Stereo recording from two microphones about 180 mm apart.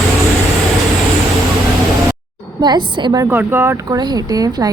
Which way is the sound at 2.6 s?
25° right (ahead or behind).